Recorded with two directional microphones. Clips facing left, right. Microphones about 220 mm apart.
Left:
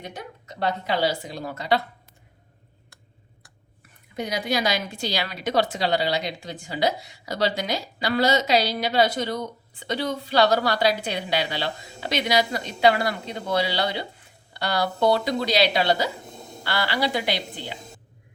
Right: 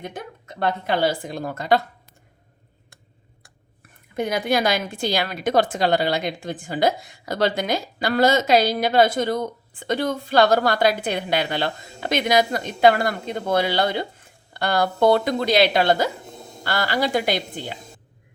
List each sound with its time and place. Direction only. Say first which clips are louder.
0.0 s a woman's voice: right 3 dB; 50° right (ahead or behind)
4.1 s a woman's voice: right 4 dB; 55° right (ahead or behind)